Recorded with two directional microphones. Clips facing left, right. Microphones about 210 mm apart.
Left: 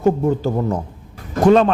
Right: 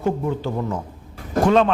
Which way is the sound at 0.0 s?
45° left (ahead or behind).